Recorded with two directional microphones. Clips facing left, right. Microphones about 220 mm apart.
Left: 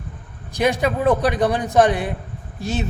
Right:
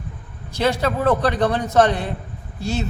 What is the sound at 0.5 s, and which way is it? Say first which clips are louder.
A man's voice: left 1 dB; 15° left (ahead or behind).